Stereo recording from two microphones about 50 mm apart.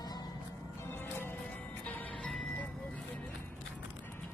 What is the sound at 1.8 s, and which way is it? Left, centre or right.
Music, left.